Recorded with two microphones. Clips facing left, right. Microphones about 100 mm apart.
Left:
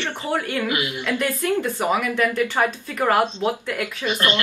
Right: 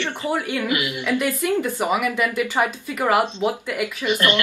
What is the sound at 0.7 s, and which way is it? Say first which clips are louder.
Speech: right 1 dB; 25° left (ahead or behind).